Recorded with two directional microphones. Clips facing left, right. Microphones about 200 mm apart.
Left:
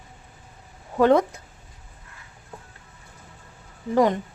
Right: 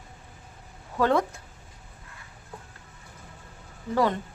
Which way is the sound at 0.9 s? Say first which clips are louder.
Left 6 dB; 20° left (ahead or behind).